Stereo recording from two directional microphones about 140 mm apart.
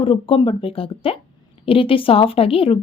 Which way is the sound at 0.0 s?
40° left (ahead or behind).